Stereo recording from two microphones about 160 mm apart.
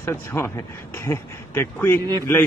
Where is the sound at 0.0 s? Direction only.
15° left (ahead or behind).